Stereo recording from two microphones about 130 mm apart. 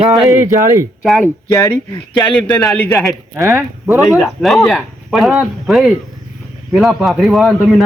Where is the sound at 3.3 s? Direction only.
20° right (ahead or behind).